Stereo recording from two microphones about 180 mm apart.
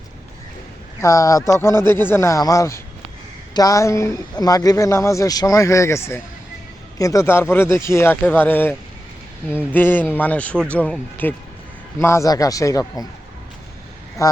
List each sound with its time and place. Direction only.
1.0 s a man's voice: 20° left (ahead or behind)
14.2 s a man's voice: 20° left (ahead or behind)